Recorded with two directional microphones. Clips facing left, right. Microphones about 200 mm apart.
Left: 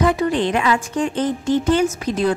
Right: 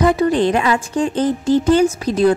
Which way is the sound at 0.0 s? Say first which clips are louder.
Right 3 dB; 40° right (ahead or behind).